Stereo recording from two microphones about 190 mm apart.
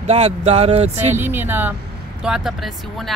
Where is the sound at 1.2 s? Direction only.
10° right (ahead or behind).